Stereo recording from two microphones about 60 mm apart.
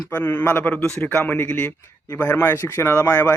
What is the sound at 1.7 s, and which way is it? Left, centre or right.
Speech, left.